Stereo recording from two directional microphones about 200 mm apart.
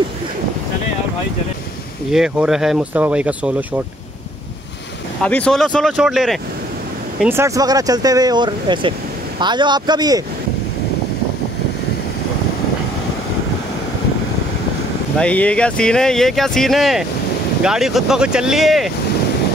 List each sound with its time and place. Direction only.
2.1 s speech: 5° right (ahead or behind)
5.2 s speech: 5° left (ahead or behind)
7.2 s speech: 10° right (ahead or behind)
15.1 s speech: 5° left (ahead or behind)